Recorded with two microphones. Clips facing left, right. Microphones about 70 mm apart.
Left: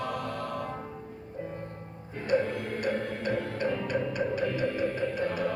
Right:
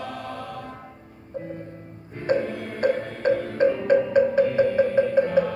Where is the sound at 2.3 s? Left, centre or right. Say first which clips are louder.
Right 3 dB; right.